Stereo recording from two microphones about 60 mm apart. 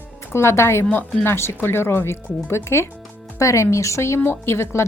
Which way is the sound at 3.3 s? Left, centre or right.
Left.